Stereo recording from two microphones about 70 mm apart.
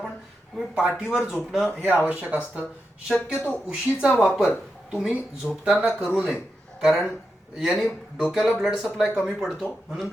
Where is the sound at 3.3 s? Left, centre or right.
Left.